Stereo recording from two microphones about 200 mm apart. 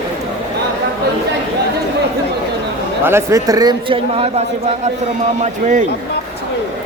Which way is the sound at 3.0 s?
15° right (ahead or behind).